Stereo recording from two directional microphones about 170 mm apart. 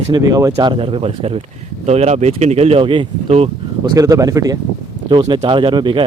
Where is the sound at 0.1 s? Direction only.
20° right (ahead or behind); by 3.5 s 35° right (ahead or behind).